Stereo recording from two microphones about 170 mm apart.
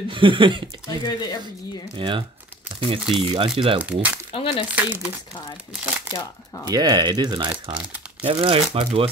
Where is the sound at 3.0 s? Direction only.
5° right (ahead or behind).